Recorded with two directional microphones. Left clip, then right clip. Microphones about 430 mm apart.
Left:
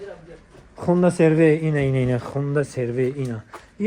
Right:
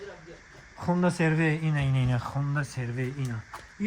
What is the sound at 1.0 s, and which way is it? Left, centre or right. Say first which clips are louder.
Speech: left 11 dB; centre.